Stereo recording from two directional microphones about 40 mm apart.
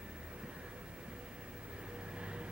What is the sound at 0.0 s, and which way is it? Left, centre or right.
Vehicle, right.